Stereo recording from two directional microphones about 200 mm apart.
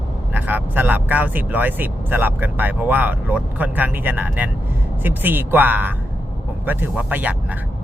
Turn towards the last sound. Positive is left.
turn(degrees=-10)  # may be behind; listen again after turning